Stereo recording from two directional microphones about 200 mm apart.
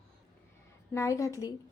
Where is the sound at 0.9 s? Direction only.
15° left (ahead or behind).